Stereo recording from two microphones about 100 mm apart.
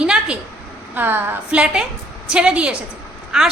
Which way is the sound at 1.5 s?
10° right (ahead or behind).